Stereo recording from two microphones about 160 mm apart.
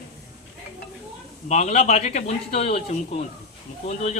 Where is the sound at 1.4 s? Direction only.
45° left (ahead or behind).